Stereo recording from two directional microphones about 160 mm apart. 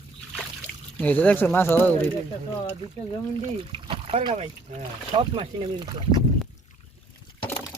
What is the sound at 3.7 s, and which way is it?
Speech, 35° right (ahead or behind).